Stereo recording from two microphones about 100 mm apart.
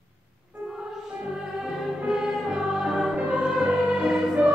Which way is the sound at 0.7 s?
5° right (ahead or behind).